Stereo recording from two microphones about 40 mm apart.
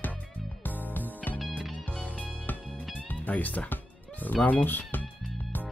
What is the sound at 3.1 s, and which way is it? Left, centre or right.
Speech, left.